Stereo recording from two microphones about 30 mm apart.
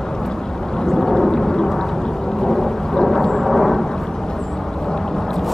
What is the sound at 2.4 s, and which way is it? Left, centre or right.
Thunder, centre.